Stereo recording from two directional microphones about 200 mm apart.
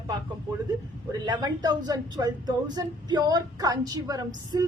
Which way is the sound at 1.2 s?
20° right (ahead or behind).